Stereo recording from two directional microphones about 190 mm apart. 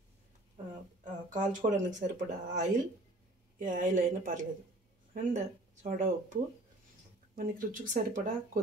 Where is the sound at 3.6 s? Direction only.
40° right (ahead or behind).